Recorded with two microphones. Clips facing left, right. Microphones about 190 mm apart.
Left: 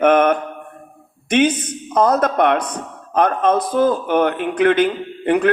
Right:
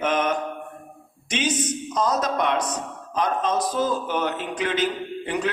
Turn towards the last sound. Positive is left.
turn(degrees=60)  # may be behind; listen again after turning